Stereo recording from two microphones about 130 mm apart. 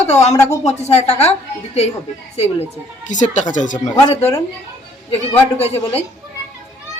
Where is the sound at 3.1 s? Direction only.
70° left (ahead or behind).